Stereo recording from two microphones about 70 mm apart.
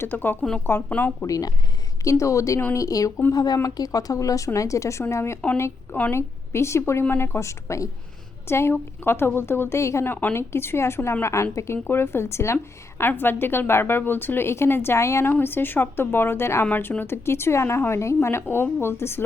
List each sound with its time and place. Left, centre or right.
0.0 s speech: left
1.3 s speech: left
2.0 s a woman's voice: left
3.3 s a woman's voice: left
5.9 s speech: left
6.1 s a woman's voice: left
10.1 s speech: left
10.3 s a woman's voice: left
15.3 s a woman's voice: left